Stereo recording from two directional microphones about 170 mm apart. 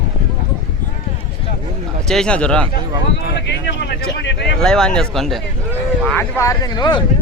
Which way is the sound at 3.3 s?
85° left.